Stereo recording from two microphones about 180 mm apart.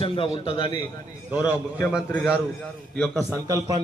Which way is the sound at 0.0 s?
30° left (ahead or behind).